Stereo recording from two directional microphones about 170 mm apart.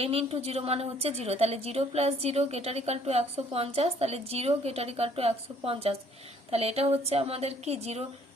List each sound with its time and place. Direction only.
0.0 s a woman's voice: 35° right (ahead or behind)